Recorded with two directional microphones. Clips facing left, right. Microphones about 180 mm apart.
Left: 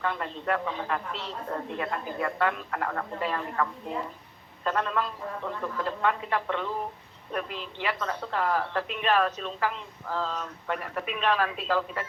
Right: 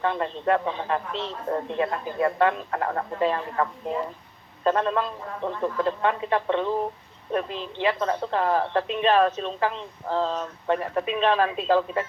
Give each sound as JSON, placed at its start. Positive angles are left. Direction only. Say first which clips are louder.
{"t": 0.0, "sound": "speech", "louder": "right 6 dB", "side_deg": -25}